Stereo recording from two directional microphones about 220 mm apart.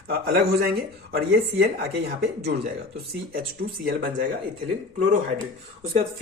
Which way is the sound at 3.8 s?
40° right (ahead or behind).